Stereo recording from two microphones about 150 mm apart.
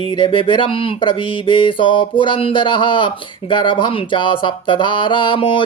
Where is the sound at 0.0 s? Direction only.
35° left (ahead or behind).